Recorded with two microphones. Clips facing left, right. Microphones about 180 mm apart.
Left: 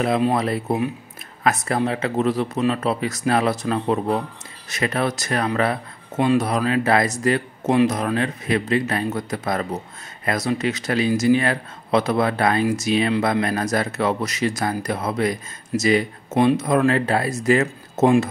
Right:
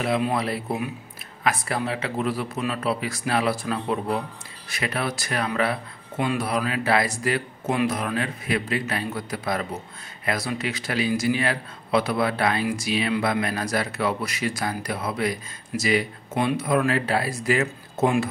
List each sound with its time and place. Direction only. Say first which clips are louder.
0.0 s speech: left 4 dB; 40° left (ahead or behind)